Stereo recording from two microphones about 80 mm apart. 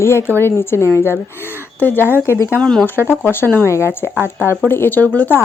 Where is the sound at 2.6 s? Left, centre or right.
Centre.